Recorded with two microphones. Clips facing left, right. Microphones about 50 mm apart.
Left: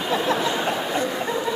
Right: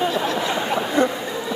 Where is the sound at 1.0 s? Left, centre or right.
Right.